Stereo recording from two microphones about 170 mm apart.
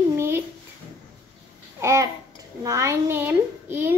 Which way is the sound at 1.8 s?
15° right (ahead or behind).